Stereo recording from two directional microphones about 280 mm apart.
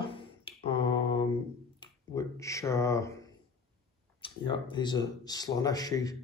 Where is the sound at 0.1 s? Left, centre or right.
Centre.